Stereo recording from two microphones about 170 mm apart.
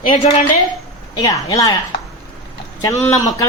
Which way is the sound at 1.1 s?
20° left (ahead or behind).